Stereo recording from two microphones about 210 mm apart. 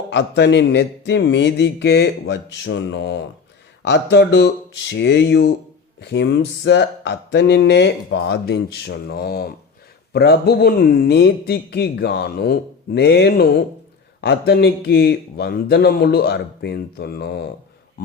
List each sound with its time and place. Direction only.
0.1 s speech: 55° left (ahead or behind)